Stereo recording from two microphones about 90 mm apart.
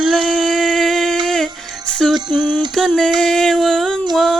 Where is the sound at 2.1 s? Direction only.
55° right (ahead or behind).